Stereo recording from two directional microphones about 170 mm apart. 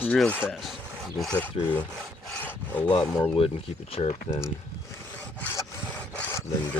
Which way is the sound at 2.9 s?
30° left (ahead or behind).